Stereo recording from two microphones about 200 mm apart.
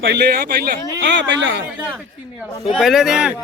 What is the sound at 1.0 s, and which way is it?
Speech, 60° right (ahead or behind).